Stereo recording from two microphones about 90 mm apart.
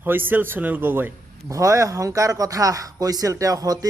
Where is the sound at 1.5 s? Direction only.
35° right (ahead or behind).